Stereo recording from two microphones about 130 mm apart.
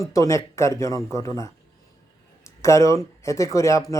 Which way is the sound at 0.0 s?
25° left (ahead or behind).